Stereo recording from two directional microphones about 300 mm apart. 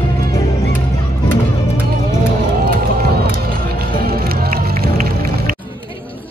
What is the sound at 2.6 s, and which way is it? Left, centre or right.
Music, right.